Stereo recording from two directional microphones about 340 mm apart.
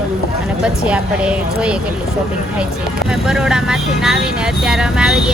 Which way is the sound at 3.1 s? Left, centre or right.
Centre.